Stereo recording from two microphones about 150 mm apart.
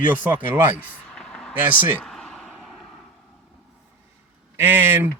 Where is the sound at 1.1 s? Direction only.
5° left (ahead or behind).